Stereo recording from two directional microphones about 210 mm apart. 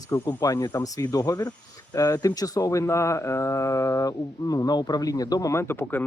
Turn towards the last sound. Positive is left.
turn(degrees=10)  # may be behind; listen again after turning